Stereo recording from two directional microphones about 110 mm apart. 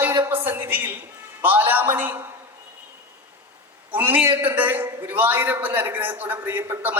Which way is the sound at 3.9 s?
15° right (ahead or behind).